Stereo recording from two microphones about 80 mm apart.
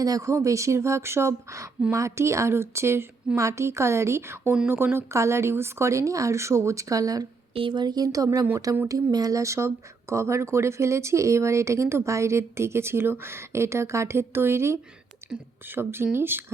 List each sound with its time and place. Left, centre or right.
0.0 s speech: right
7.6 s speech: right
15.2 s a sound: right
15.6 s speech: right